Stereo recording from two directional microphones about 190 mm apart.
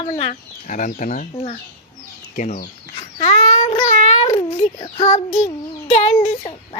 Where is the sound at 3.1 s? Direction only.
35° left (ahead or behind).